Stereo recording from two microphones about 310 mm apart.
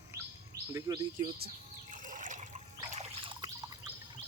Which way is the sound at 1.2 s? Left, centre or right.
Right.